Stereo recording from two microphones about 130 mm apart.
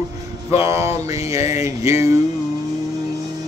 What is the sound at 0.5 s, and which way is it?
Speech, 20° right (ahead or behind).